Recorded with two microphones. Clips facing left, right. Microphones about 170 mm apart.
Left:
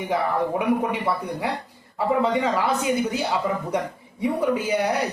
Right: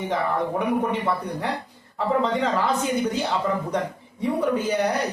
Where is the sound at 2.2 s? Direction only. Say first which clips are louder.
Left 1 dB; 10° left (ahead or behind).